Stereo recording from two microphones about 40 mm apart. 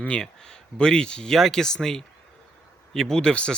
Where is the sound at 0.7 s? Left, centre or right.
Left.